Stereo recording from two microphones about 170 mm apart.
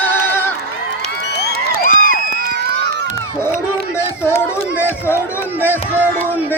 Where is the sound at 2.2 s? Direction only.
65° right (ahead or behind).